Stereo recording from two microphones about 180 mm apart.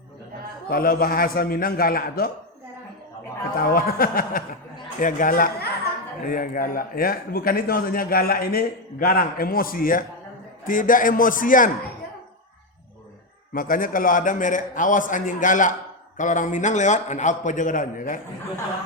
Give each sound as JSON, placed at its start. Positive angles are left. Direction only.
{"t": 0.7, "sound": "a man's voice", "side_deg": 55}
{"t": 3.7, "sound": "a man's voice", "side_deg": 55}
{"t": 13.5, "sound": "a man's voice", "side_deg": 50}